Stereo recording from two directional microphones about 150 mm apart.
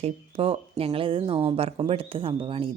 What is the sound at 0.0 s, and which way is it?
Speech, 40° right (ahead or behind).